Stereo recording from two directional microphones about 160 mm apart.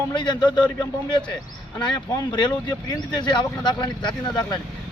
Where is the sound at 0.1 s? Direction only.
30° left (ahead or behind).